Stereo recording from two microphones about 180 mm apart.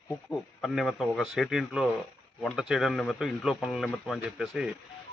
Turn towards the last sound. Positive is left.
turn(degrees=-5)  # may be behind; listen again after turning